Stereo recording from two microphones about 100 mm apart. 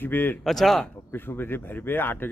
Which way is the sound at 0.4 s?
Centre (ahead or behind).